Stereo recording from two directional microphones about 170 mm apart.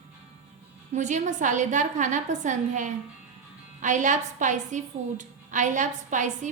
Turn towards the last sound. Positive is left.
turn(degrees=-45)  # may be behind; listen again after turning